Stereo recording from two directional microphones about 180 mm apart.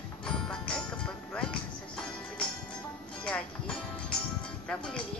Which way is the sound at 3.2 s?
5° left (ahead or behind).